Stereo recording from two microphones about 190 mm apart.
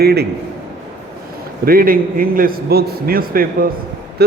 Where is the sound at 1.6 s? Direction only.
50° right (ahead or behind).